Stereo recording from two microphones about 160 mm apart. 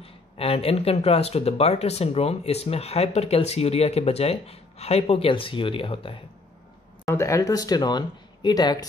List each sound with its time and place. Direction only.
0.0 s speech: 35° left (ahead or behind)
7.1 s speech: 20° left (ahead or behind)